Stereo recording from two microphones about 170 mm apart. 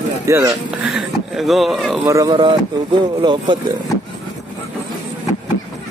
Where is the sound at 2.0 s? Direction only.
20° right (ahead or behind).